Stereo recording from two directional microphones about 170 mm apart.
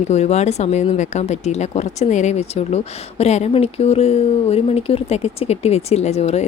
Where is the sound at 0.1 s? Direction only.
40° left (ahead or behind).